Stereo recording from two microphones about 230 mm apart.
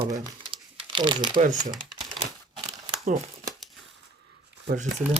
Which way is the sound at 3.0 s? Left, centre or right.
Right.